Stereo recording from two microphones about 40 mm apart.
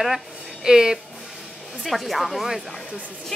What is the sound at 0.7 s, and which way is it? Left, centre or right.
Speech, centre.